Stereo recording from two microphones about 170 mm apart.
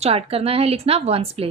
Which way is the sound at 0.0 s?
35° right (ahead or behind).